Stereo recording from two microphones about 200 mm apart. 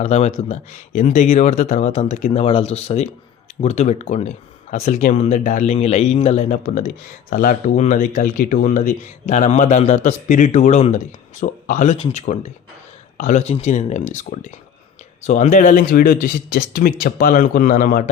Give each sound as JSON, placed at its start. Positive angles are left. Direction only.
{"t": 0.0, "sound": "a man's voice", "side_deg": 35}